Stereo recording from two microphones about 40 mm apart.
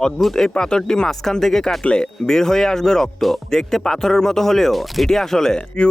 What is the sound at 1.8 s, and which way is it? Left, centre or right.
Speech, left.